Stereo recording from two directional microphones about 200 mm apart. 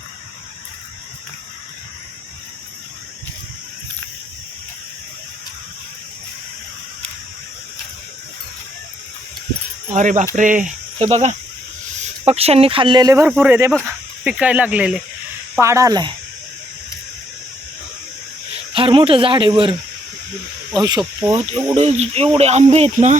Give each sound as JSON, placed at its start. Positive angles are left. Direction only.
{"t": 9.9, "sound": "speech", "side_deg": -40}
{"t": 18.7, "sound": "speech", "side_deg": -25}
{"t": 20.7, "sound": "speech", "side_deg": -20}
{"t": 21.8, "sound": "speech", "side_deg": -35}